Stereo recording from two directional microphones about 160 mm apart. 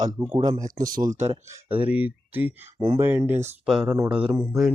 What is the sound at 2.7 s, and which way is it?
Speech, 25° right (ahead or behind).